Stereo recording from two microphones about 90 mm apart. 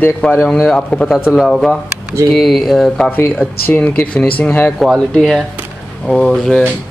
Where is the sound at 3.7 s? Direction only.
20° left (ahead or behind).